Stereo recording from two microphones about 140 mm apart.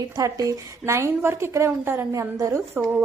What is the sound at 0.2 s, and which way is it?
A woman's voice, 25° right (ahead or behind).